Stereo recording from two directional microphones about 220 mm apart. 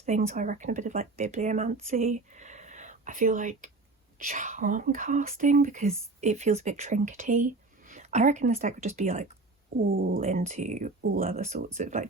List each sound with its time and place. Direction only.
0.0 s speech: 30° right (ahead or behind)